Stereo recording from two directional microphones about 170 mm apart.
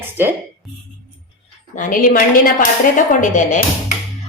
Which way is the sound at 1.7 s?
55° left (ahead or behind).